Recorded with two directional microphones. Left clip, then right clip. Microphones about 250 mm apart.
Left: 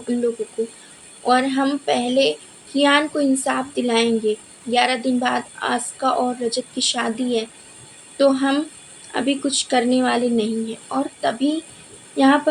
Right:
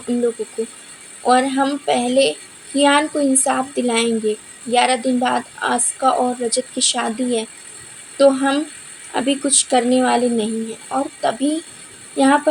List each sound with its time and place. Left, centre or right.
1.2 s a woman's voice: right